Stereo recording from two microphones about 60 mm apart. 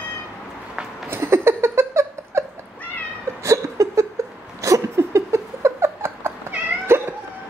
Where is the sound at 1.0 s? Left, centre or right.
Right.